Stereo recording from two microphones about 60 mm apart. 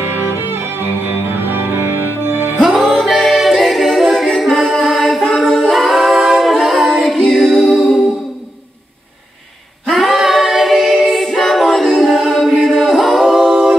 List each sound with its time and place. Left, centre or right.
0.0 s music: right
2.6 s a capella: centre
9.8 s a capella: centre